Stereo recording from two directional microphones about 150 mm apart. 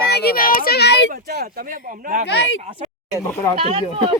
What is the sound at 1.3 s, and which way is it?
Speech, 85° right.